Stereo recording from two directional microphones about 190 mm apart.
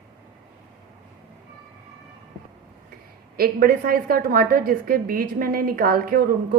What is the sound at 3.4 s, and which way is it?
A woman's voice, 50° right (ahead or behind).